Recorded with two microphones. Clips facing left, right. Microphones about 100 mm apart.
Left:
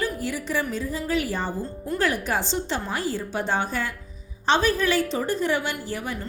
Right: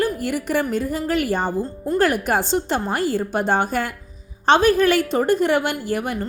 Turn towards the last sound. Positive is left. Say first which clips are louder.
# right 6 dB
turn(degrees=-60)  # may be behind; listen again after turning